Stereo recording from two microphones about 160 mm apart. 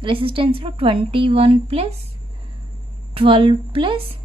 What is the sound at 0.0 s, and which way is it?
A woman's voice, 35° right (ahead or behind).